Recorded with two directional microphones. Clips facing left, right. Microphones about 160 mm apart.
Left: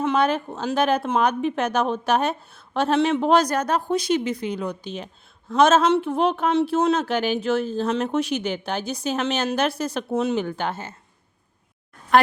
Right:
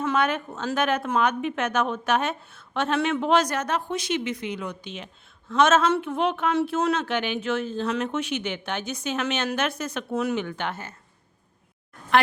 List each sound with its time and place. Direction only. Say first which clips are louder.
0.2 s a woman's voice: left 3 dB; 35° left (ahead or behind)
10.1 s speech: left 3 dB; 25° left (ahead or behind)
10.3 s a woman's voice: left 4 dB; 35° left (ahead or behind)
12.1 s speech: left 4 dB; 40° left (ahead or behind)